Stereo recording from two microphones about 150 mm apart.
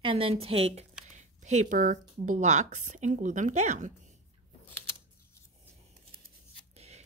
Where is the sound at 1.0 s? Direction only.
55° right (ahead or behind).